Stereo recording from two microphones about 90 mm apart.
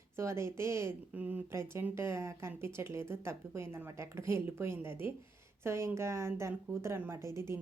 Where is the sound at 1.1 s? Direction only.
20° right (ahead or behind).